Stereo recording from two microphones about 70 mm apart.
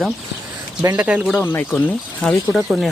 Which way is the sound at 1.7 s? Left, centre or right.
Centre.